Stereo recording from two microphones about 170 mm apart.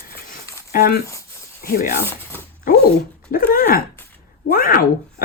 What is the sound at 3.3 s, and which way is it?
Speech, 55° left (ahead or behind).